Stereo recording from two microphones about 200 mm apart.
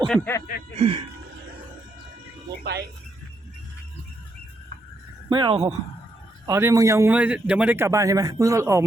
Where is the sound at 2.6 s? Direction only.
55° right (ahead or behind).